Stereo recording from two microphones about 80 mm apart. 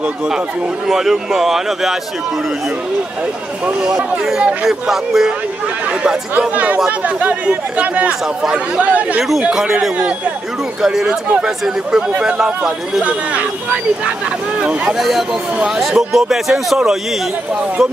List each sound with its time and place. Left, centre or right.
0.0 s speech: centre
3.6 s speech: centre
9.2 s speech: centre
14.6 s speech: centre
15.0 s speech: centre